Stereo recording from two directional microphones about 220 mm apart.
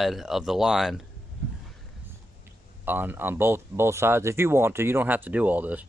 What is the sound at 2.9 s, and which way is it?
Speech, 10° right (ahead or behind).